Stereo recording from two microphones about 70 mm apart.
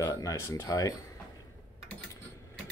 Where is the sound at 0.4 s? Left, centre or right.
Left.